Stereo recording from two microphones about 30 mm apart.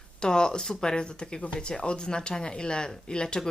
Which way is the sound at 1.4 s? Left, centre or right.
Left.